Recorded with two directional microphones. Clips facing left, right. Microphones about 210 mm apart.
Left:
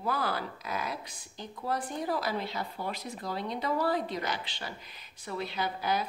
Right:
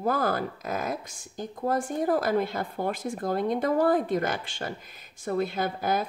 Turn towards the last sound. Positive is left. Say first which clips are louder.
# right 4 dB
turn(degrees=-45)  # may be behind; listen again after turning